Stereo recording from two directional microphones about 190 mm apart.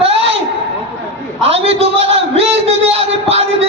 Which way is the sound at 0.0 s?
30° right (ahead or behind).